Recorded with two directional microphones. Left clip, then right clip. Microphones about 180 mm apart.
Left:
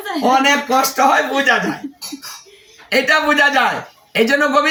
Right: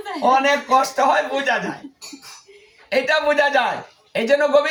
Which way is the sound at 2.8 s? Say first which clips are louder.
Left 4 dB; 15° right (ahead or behind).